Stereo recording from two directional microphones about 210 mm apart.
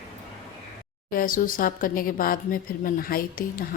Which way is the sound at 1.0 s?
40° left (ahead or behind).